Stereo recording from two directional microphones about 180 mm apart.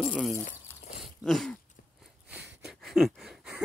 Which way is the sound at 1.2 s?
Centre (ahead or behind).